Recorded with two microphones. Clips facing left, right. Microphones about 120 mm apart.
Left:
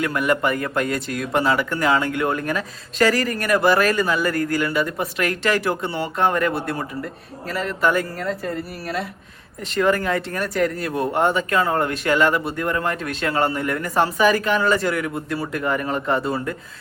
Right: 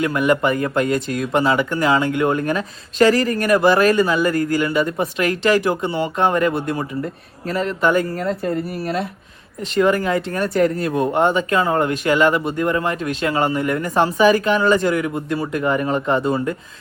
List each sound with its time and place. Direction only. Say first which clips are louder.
0.0 s speech: right 3 dB; 20° right (ahead or behind)
7.4 s speech: right 3 dB; 30° right (ahead or behind)
9.8 s speech: right 2 dB; 15° right (ahead or behind)
10.2 s speech: right 4 dB; 30° right (ahead or behind)
10.9 s speech: right 1 dB; 20° right (ahead or behind)